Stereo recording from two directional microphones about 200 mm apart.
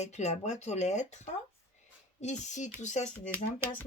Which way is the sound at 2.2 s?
35° left (ahead or behind).